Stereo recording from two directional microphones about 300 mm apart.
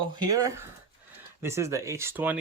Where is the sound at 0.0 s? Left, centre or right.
Centre.